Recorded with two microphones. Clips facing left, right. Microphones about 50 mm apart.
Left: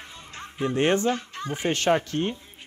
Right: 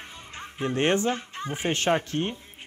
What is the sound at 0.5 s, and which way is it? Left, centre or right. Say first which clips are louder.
Speech: left 1 dB; right.